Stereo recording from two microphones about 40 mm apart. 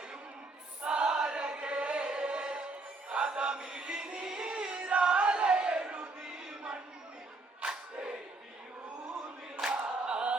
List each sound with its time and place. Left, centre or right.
0.9 s chant: right
3.1 s music: right
4.7 s a sound: right
7.6 s crowd: right
9.6 s choir: right